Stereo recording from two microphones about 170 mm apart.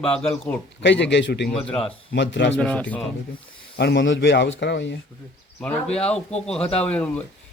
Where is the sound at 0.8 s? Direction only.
90° left.